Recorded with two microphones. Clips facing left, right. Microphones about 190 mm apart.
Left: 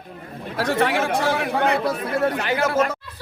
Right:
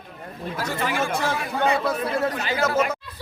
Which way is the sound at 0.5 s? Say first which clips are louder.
Left 6 dB; 75° left (ahead or behind).